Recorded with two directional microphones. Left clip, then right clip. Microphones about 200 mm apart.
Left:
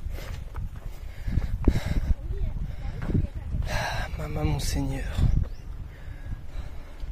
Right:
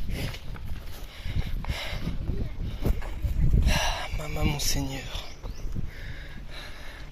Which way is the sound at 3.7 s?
25° left (ahead or behind).